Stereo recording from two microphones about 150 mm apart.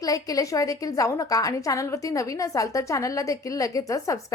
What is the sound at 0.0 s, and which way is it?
A woman's voice, 25° left (ahead or behind).